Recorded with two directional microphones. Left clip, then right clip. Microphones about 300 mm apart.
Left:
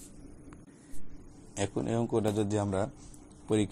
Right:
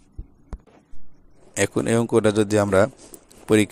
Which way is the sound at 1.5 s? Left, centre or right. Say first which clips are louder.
Right 12 dB; right.